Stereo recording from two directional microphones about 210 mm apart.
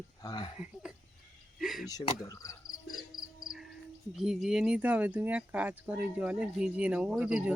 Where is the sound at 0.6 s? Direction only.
5° right (ahead or behind).